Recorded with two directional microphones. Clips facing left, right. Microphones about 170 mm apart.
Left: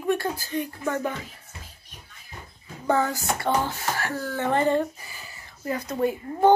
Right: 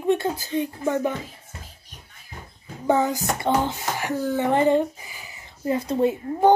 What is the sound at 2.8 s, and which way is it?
Speech, 20° right (ahead or behind).